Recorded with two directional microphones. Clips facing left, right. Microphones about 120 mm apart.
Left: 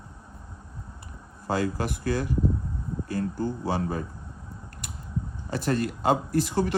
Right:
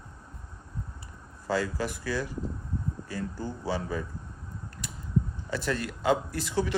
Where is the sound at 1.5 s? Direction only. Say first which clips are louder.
Left 2 dB; 55° left (ahead or behind).